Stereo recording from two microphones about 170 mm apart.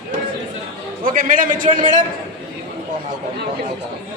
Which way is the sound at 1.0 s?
55° right (ahead or behind).